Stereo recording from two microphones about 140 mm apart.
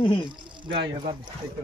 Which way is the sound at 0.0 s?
35° left (ahead or behind).